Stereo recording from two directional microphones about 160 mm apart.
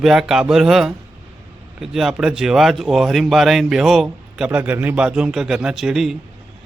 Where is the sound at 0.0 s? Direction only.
5° right (ahead or behind).